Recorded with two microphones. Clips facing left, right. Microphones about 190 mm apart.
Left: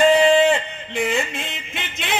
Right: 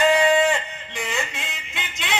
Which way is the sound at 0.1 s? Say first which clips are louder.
Left 4 dB; 30° left (ahead or behind).